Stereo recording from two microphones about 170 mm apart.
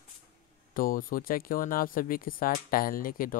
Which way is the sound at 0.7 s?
55° left (ahead or behind).